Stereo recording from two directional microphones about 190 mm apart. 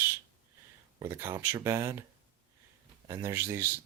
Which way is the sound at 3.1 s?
15° right (ahead or behind).